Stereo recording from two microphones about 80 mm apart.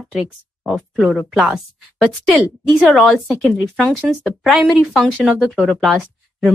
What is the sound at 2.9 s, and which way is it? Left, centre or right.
Speech, centre.